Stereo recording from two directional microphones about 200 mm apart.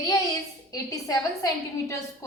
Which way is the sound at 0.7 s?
15° left (ahead or behind).